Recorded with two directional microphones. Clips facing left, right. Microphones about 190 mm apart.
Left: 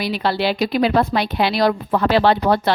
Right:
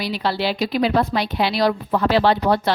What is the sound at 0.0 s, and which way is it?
A woman's voice, 55° left (ahead or behind).